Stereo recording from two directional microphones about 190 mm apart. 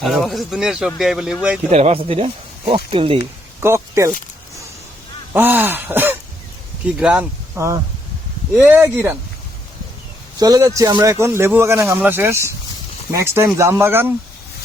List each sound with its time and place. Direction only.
0.0 s speech: centre (ahead or behind)
1.7 s speech: 35° right (ahead or behind)
3.6 s speech: 15° right (ahead or behind)
5.3 s speech: 10° right (ahead or behind)
10.4 s speech: 20° right (ahead or behind)